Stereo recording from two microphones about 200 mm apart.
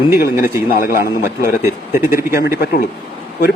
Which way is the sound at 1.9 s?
15° right (ahead or behind).